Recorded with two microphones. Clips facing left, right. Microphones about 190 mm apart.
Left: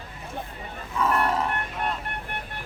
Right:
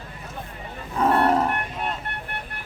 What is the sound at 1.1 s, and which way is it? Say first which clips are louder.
Livestock: right 5 dB; 30° right (ahead or behind).